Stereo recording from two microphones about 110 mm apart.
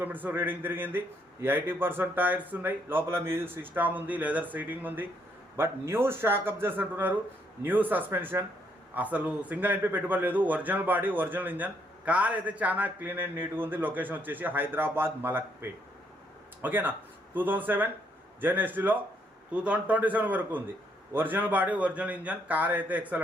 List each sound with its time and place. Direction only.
0.0 s speech: 15° right (ahead or behind)